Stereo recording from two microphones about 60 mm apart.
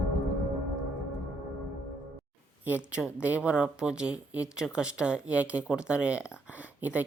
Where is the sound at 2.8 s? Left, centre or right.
Centre.